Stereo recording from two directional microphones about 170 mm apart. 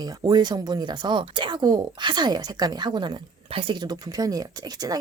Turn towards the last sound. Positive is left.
turn(degrees=-20)  # may be behind; listen again after turning